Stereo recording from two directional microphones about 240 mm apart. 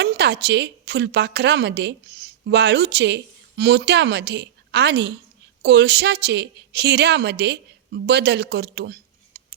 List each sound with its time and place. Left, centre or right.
0.0 s a woman's voice: right